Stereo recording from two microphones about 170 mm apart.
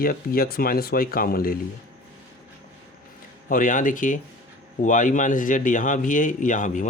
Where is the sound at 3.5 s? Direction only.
50° left (ahead or behind).